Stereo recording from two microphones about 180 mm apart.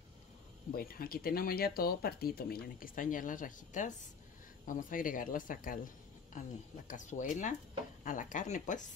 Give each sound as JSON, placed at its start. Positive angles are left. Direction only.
{"t": 0.7, "sound": "speech", "side_deg": 55}
{"t": 6.9, "sound": "speech", "side_deg": 45}